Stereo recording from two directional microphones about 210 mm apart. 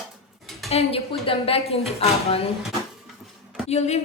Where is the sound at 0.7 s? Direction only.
30° left (ahead or behind).